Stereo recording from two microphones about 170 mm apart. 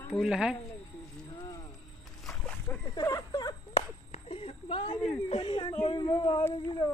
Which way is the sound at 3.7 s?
35° left (ahead or behind).